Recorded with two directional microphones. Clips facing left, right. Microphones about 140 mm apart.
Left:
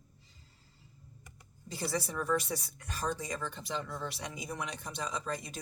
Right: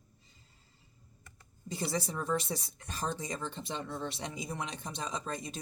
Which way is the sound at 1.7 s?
25° right (ahead or behind).